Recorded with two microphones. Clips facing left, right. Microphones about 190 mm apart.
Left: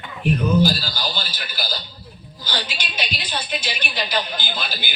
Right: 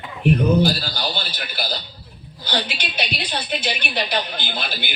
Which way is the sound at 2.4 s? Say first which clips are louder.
Right 4 dB; 60° right (ahead or behind).